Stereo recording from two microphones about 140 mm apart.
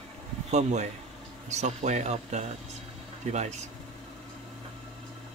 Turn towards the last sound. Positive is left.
turn(degrees=-55)  # may be behind; listen again after turning